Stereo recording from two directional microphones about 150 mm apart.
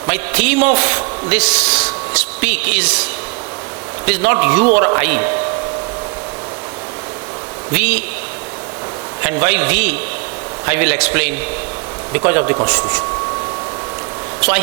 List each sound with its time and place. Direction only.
0.1 s a man's voice: 10° right (ahead or behind)
7.7 s a man's voice: 10° right (ahead or behind)
9.2 s a man's voice: 10° right (ahead or behind)